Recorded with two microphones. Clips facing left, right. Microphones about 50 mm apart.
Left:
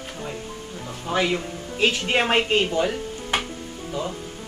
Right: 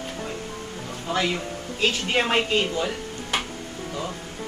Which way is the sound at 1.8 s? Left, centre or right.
Left.